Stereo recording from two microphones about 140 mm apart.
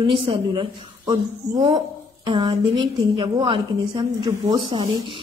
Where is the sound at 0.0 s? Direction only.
35° right (ahead or behind).